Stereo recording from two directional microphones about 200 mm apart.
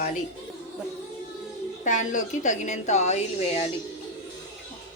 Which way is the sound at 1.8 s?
40° left (ahead or behind).